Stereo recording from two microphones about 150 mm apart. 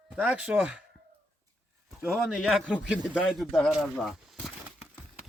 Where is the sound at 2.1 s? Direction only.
5° right (ahead or behind).